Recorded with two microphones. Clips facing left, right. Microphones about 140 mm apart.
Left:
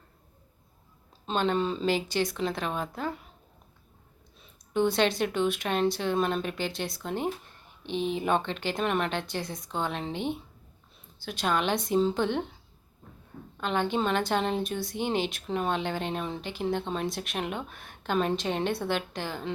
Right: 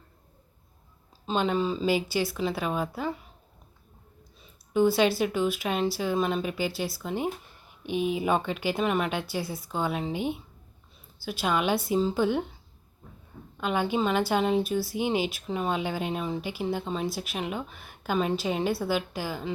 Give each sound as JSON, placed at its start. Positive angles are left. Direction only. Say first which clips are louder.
{"t": 1.3, "sound": "a woman's voice", "louder": "right 1 dB", "side_deg": -5}
{"t": 4.4, "sound": "a woman's voice", "louder": "right 3 dB", "side_deg": -5}
{"t": 13.6, "sound": "a woman's voice", "louder": "right 1 dB", "side_deg": -10}